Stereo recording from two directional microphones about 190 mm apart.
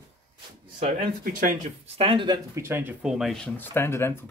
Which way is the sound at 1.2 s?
45° right (ahead or behind).